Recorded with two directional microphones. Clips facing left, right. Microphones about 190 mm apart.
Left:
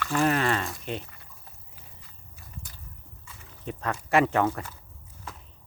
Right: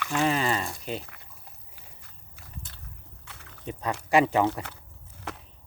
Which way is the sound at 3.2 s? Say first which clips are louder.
Right 1 dB; 70° right (ahead or behind).